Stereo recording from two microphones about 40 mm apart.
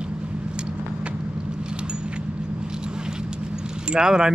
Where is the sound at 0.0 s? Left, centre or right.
Right.